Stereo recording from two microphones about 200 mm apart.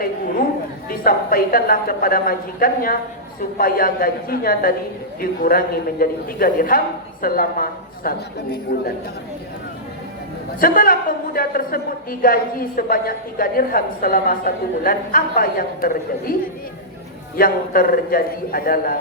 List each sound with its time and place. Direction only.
0.9 s a woman's voice: 45° left (ahead or behind)
10.6 s a woman's voice: 45° left (ahead or behind)
17.3 s a woman's voice: 45° left (ahead or behind)